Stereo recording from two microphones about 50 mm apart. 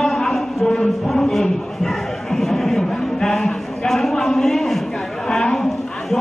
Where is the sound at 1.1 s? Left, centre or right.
Centre.